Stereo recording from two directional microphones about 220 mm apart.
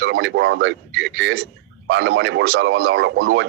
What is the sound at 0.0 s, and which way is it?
Speech, 50° right (ahead or behind).